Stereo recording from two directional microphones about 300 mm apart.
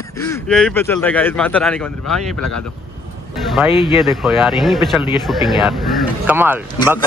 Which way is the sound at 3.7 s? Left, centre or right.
Centre.